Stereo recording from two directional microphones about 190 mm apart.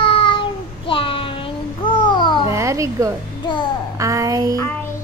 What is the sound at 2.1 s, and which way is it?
Babbling, 25° left (ahead or behind).